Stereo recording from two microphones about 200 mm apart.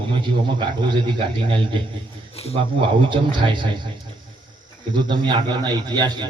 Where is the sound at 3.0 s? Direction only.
25° right (ahead or behind).